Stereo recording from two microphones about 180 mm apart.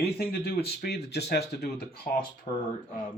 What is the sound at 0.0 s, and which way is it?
Speech, 60° left (ahead or behind).